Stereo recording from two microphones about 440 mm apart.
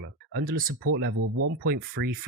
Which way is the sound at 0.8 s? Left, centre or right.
Right.